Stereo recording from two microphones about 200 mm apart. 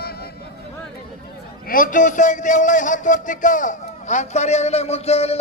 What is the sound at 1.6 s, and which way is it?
A man's voice, 45° left (ahead or behind).